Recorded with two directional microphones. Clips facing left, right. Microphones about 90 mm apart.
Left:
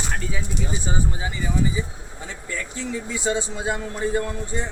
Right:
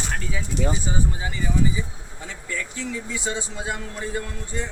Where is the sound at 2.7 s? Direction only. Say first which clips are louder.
Left 2 dB; 30° left (ahead or behind).